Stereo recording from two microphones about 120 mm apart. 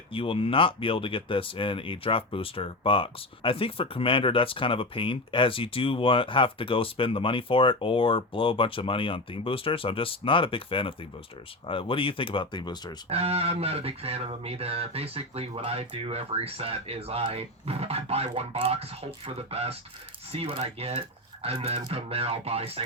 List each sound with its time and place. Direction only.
0.1 s speech: 50° left (ahead or behind)
13.1 s speech: 55° right (ahead or behind)